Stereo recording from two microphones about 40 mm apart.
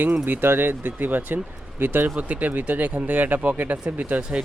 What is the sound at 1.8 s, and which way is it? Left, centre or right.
Speech, right.